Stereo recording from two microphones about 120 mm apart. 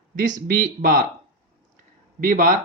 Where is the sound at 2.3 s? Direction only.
90° right.